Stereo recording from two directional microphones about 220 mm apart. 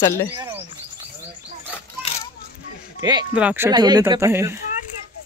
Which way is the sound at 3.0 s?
20° right (ahead or behind).